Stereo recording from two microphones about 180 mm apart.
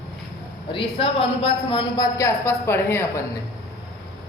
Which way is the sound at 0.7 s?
30° left (ahead or behind).